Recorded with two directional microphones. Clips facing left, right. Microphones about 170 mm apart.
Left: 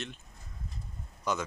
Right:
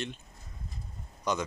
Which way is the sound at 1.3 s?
5° left (ahead or behind).